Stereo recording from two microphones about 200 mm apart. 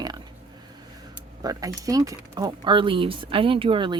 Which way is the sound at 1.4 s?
20° right (ahead or behind).